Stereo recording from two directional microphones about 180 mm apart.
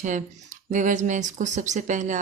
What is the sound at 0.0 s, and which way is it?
Speech, 45° right (ahead or behind).